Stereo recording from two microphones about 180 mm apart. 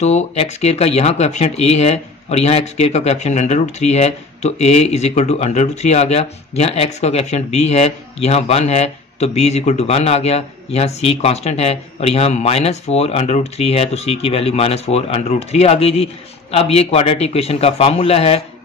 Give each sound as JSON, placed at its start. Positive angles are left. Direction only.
{"t": 0.0, "sound": "speech", "side_deg": 40}